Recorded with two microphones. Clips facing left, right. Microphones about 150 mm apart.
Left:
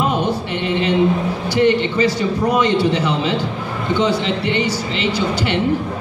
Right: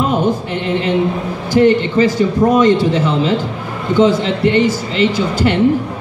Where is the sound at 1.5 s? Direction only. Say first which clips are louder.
Right 5 dB; 50° right (ahead or behind).